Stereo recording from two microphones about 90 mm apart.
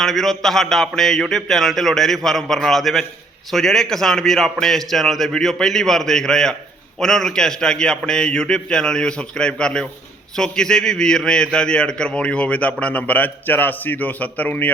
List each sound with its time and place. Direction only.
0.0 s a man's voice: 5° left (ahead or behind)